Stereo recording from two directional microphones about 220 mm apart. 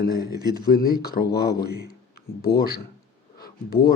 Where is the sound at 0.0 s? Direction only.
45° left (ahead or behind).